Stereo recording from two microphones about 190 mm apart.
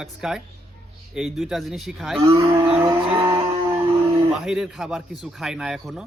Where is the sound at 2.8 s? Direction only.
20° right (ahead or behind).